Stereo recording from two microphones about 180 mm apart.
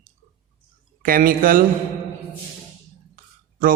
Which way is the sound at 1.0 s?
50° right (ahead or behind).